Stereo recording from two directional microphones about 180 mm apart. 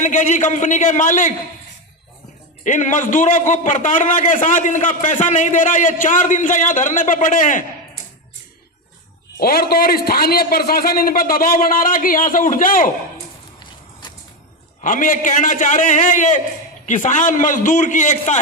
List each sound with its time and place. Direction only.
0.0 s a man's voice: 45° left (ahead or behind)
2.6 s a man's voice: 45° left (ahead or behind)
9.4 s a man's voice: 55° left (ahead or behind)
14.8 s a man's voice: 45° left (ahead or behind)